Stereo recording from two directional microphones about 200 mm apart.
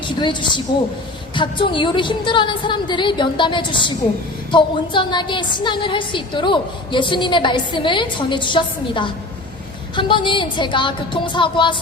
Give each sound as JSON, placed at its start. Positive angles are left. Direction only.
{"t": 0.0, "sound": "a woman's voice", "side_deg": 25}